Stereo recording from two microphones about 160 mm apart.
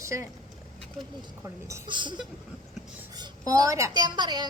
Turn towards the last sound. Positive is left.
turn(degrees=-25)  # may be behind; listen again after turning